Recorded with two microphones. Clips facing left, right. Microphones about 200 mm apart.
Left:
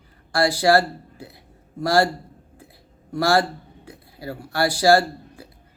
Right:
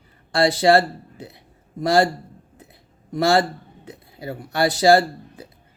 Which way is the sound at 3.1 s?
20° right (ahead or behind).